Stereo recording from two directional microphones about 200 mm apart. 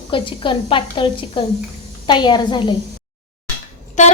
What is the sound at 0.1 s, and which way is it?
Speech, 25° left (ahead or behind).